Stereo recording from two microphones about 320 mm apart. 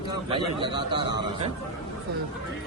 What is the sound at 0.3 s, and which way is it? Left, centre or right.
Speech, centre.